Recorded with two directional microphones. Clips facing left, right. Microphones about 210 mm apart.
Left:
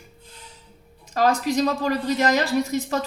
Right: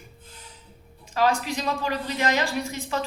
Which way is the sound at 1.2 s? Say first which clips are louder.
Left 4 dB; 40° left (ahead or behind).